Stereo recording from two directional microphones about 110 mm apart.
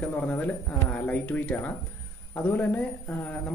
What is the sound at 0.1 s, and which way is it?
A man's voice, 15° left (ahead or behind).